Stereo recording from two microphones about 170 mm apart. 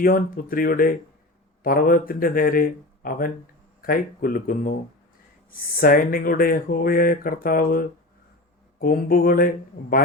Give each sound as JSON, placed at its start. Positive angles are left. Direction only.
{"t": 0.0, "sound": "speech", "side_deg": 55}